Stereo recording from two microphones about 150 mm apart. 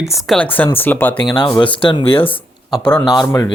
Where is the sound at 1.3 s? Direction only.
30° left (ahead or behind).